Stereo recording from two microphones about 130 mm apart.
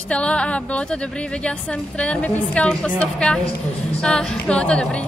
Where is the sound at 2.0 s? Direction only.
10° left (ahead or behind).